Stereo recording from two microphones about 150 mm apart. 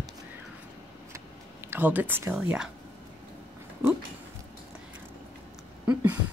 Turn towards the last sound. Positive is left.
turn(degrees=-10)  # may be behind; listen again after turning